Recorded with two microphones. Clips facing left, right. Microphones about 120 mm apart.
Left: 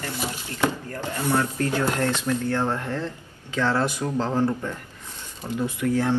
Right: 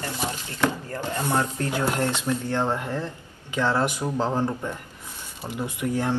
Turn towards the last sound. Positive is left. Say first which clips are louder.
# left 3 dB
turn(degrees=-15)  # may be behind; listen again after turning